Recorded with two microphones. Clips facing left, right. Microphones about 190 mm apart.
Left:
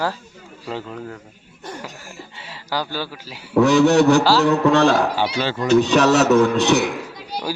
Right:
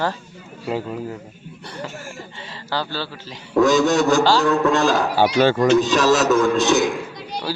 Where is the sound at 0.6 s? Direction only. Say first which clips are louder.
Right 4 dB; 10° right (ahead or behind).